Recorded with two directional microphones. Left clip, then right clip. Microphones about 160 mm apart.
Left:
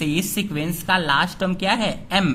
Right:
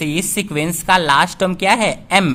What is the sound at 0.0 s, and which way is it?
A woman's voice, 25° right (ahead or behind).